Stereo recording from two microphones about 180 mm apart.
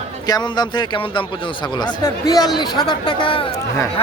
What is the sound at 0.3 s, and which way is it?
Speech, 25° left (ahead or behind).